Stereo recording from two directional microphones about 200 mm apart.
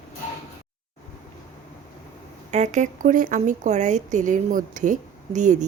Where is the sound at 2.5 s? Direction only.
35° right (ahead or behind).